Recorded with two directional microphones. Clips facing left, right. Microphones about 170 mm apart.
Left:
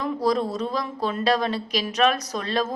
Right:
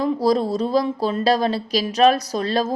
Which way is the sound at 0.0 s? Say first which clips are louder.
Right 4 dB; 30° right (ahead or behind).